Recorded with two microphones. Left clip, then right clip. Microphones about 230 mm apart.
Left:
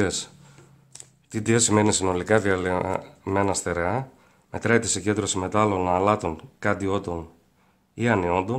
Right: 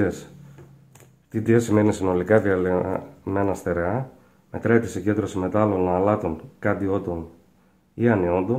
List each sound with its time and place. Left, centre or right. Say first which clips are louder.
0.0 s speech: right 1 dB; left
1.3 s speech: right 1 dB; left